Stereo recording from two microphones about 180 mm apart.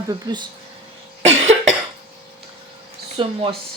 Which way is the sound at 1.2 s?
35° right (ahead or behind).